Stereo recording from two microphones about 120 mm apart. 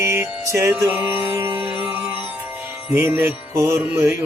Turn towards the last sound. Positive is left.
turn(degrees=-20)  # may be behind; listen again after turning